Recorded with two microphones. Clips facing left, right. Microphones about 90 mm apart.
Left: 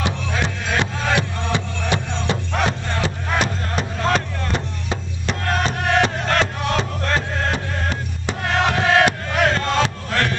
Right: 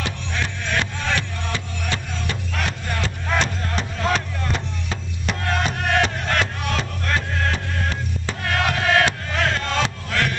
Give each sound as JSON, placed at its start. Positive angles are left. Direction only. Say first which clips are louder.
{"t": 0.0, "sound": "music", "louder": "left 4 dB", "side_deg": 20}
{"t": 2.1, "sound": "music", "louder": "left 5 dB", "side_deg": 30}
{"t": 3.3, "sound": "music", "louder": "right 2 dB", "side_deg": 5}
{"t": 6.7, "sound": "music", "louder": "left 3 dB", "side_deg": 25}
{"t": 9.5, "sound": "a sound", "louder": "left 4 dB", "side_deg": 0}